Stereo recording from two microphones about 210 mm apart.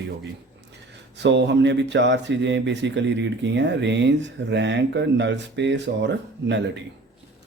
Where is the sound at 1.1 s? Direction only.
55° right (ahead or behind).